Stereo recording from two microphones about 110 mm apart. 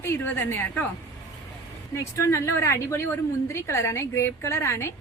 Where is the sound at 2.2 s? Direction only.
25° left (ahead or behind).